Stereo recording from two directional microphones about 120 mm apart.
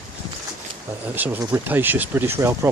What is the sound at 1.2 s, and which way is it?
Speech, 15° right (ahead or behind).